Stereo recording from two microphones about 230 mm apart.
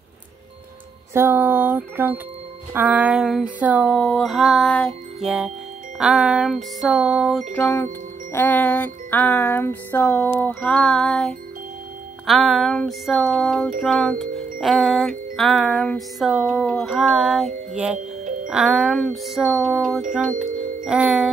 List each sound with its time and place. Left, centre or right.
1.1 s a sound: centre
2.7 s music: centre
17.9 s music: right
18.5 s music: centre